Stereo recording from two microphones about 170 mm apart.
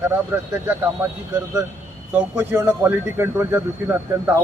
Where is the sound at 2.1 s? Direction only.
15° right (ahead or behind).